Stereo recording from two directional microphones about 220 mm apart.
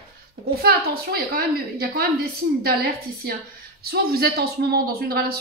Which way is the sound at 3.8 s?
45° right (ahead or behind).